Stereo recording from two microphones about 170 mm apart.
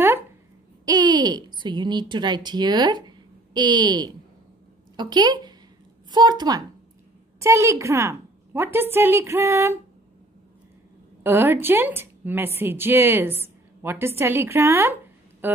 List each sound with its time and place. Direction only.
0.8 s a woman's voice: 25° right (ahead or behind)
11.2 s a woman's voice: 15° right (ahead or behind)